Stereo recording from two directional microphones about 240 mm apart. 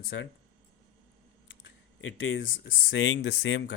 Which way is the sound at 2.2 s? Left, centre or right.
Left.